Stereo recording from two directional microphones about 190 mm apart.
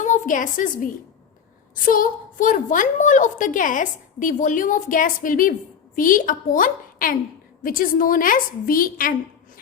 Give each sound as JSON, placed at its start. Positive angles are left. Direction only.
{"t": 0.0, "sound": "a woman's voice", "side_deg": 40}